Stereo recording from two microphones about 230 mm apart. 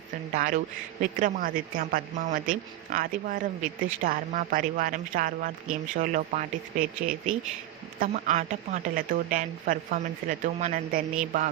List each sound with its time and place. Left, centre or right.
0.3 s a woman's voice: right